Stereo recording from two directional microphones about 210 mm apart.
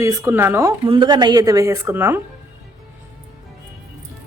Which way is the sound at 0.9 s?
20° right (ahead or behind).